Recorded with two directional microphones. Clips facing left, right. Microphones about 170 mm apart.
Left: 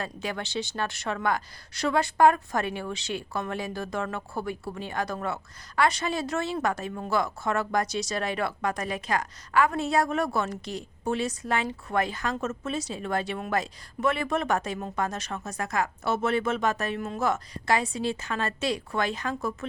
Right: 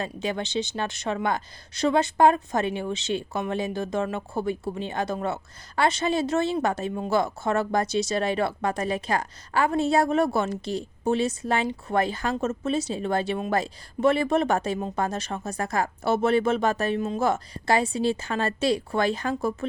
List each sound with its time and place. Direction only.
0.0 s a woman's voice: 20° right (ahead or behind)